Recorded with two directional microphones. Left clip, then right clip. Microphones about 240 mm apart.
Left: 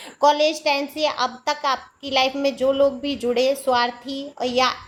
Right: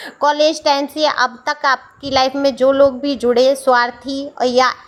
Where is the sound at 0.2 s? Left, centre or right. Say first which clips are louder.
Right 3 dB; centre.